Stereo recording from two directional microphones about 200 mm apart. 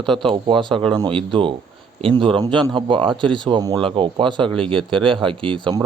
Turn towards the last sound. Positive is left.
turn(degrees=-25)  # may be behind; listen again after turning